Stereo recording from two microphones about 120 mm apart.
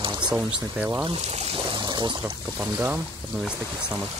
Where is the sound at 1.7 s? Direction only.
40° right (ahead or behind).